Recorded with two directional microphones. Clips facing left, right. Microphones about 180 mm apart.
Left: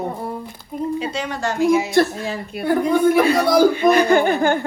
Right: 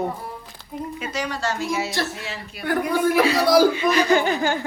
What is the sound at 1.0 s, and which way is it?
Speech, 25° left (ahead or behind).